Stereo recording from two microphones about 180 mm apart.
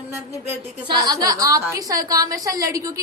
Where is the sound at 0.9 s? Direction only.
20° right (ahead or behind).